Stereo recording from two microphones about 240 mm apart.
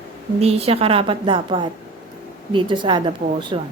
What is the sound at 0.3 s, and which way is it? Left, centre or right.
Speech, right.